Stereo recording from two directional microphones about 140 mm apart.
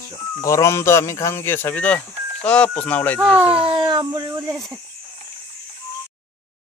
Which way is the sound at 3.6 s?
35° right (ahead or behind).